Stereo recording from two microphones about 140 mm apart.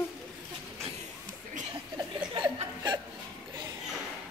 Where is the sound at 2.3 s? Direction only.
30° right (ahead or behind).